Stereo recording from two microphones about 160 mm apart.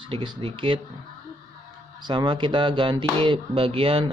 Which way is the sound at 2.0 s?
30° right (ahead or behind).